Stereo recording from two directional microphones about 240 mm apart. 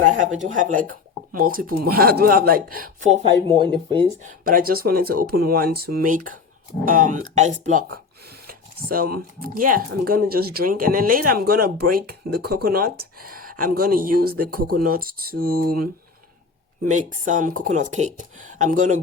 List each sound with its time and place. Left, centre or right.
0.1 s speech: right
4.2 s speech: right
16.8 s speech: right